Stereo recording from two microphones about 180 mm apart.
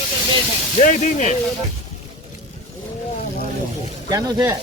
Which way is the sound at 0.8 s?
45° left (ahead or behind).